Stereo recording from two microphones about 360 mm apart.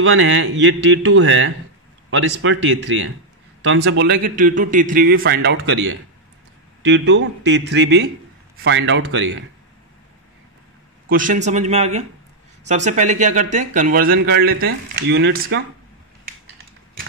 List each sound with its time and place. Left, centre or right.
0.0 s a man's voice: right
11.1 s speech: right